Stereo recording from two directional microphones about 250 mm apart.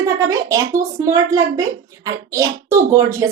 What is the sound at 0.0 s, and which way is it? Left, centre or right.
A child's voice, centre.